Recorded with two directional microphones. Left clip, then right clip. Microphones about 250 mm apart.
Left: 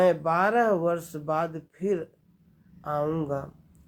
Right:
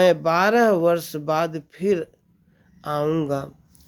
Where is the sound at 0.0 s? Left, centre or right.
Right.